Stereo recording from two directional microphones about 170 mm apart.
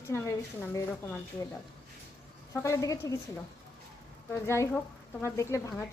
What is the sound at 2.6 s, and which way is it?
Speech, 20° left (ahead or behind).